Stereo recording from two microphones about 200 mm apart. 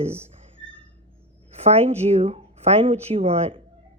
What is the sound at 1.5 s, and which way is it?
Speech, 30° right (ahead or behind).